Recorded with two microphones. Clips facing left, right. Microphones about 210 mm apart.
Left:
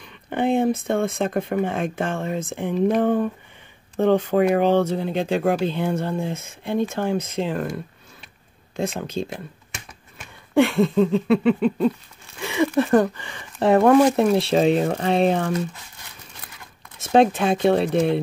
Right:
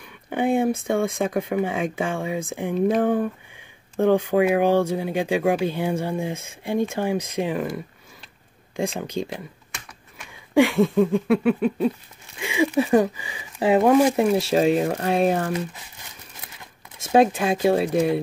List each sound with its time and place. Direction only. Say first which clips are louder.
0.0 s speech: left 1 dB; 10° right (ahead or behind)
9.0 s speech: even; 15° right (ahead or behind)
10.5 s speech: even; 10° right (ahead or behind)
17.1 s speech: left 1 dB; 5° right (ahead or behind)